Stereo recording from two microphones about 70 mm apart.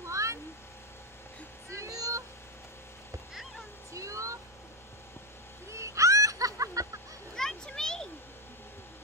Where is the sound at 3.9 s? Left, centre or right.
Right.